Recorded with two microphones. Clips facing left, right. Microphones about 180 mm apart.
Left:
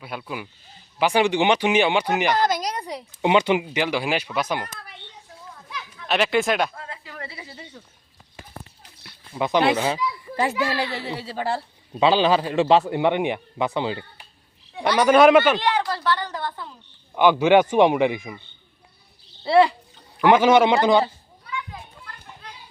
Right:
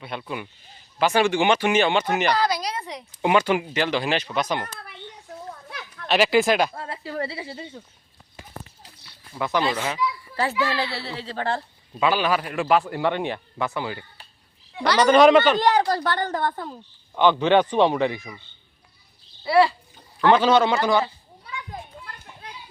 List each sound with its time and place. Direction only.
0.0 s speech: 5° left (ahead or behind)
2.4 s a sound: 45° left (ahead or behind)
3.2 s speech: 20° left (ahead or behind)
5.5 s children playing: 55° right (ahead or behind)
6.1 s speech: 5° right (ahead or behind)
6.7 s speech: 35° right (ahead or behind)
9.3 s a man's voice: 20° left (ahead or behind)
11.9 s a man's voice: 25° left (ahead or behind)
15.0 s speech: 5° left (ahead or behind)
15.5 s a woman's voice: 40° right (ahead or behind)
17.2 s speech: 10° left (ahead or behind)
19.5 s a man's voice: 20° left (ahead or behind)